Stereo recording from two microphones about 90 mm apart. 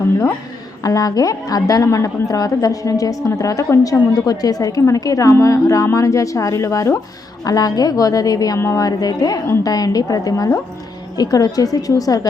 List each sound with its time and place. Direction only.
0.8 s a woman's voice: 40° left (ahead or behind)
8.5 s a woman's voice: 30° left (ahead or behind)
8.8 s a woman's voice: 45° left (ahead or behind)